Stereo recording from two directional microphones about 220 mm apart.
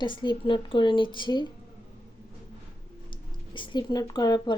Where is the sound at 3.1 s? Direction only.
20° left (ahead or behind).